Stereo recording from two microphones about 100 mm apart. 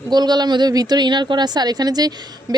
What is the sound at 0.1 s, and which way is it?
A woman's voice, 45° right (ahead or behind).